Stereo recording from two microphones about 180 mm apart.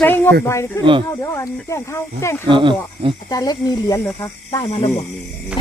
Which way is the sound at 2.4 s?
25° right (ahead or behind).